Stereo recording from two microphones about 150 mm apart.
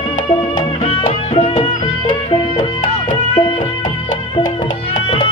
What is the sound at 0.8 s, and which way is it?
Music, 40° left (ahead or behind).